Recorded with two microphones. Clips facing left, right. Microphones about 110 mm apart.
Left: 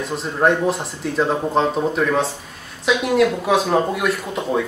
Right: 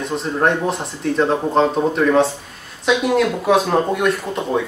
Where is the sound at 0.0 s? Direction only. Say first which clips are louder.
Even; centre (ahead or behind).